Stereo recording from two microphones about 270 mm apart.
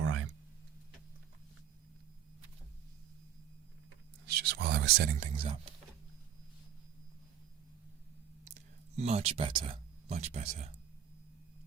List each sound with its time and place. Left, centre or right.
0.0 s a sound: right
4.3 s speech: right
8.5 s speech: right